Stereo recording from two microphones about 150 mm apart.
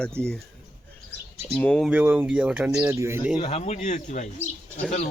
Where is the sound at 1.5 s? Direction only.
5° left (ahead or behind).